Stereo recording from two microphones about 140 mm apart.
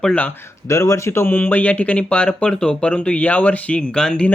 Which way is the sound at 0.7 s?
20° left (ahead or behind).